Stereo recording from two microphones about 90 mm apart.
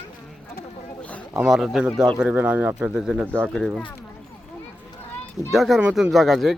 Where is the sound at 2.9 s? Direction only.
10° right (ahead or behind).